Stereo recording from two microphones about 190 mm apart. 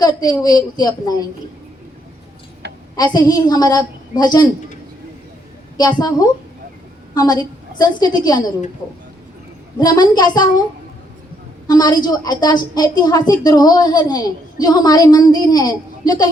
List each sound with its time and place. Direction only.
0.0 s a woman's voice: 20° left (ahead or behind)
2.9 s a woman's voice: 20° left (ahead or behind)
7.1 s a woman's voice: 20° left (ahead or behind)
9.8 s a woman's voice: 20° left (ahead or behind)
11.7 s a woman's voice: 20° left (ahead or behind)